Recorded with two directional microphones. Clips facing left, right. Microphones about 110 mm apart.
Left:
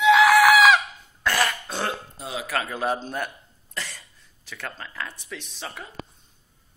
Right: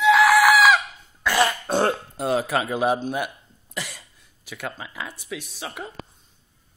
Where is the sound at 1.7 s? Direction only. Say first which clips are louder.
Right 8 dB; 40° right (ahead or behind).